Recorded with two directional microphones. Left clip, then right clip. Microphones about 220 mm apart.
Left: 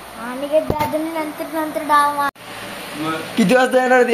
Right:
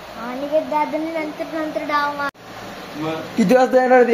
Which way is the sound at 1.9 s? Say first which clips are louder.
Left 7 dB; 10° left (ahead or behind).